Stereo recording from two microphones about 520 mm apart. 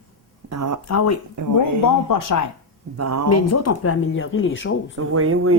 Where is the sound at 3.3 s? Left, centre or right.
Left.